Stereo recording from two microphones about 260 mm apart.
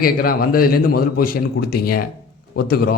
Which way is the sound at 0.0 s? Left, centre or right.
Left.